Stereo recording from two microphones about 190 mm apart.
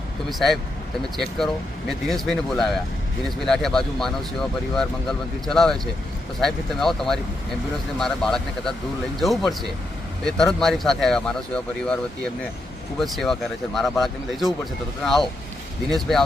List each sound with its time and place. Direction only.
0.3 s speech: centre (ahead or behind)